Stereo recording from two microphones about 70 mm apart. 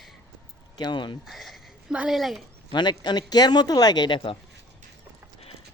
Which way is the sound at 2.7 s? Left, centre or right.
Left.